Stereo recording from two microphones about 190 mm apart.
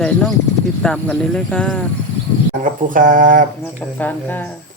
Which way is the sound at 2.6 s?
45° right (ahead or behind).